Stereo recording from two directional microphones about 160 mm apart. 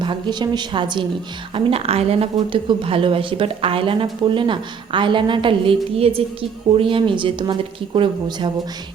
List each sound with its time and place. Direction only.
0.0 s speech: 30° right (ahead or behind)